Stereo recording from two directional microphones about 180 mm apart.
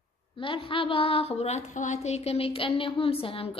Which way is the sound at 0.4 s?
30° left (ahead or behind).